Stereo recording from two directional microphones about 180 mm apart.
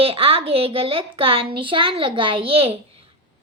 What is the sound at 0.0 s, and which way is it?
A child's voice, 30° right (ahead or behind).